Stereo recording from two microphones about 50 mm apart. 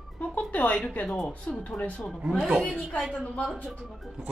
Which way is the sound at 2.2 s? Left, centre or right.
Centre.